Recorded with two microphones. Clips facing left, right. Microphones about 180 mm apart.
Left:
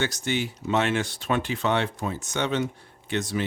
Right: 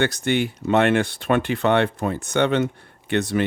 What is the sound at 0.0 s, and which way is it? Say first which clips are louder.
Speech: right 6 dB; 60° right (ahead or behind).